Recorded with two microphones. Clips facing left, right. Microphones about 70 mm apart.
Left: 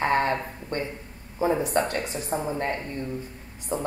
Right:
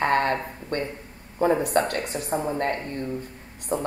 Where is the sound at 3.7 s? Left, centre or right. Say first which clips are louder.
Right 2 dB; right.